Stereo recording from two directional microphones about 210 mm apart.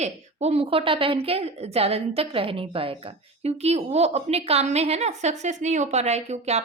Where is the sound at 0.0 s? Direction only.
30° right (ahead or behind).